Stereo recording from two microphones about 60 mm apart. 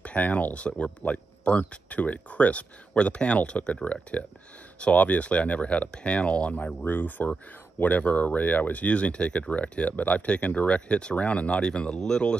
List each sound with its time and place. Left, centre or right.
0.0 s speech: left